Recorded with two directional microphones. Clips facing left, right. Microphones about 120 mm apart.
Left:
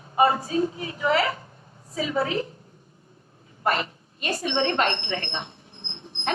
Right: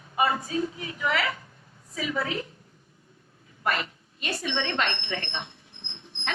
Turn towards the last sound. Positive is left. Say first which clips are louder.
# left 6 dB
turn(degrees=35)  # may be behind; listen again after turning